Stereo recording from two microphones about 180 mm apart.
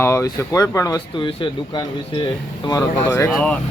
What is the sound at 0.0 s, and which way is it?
Speech, 15° left (ahead or behind).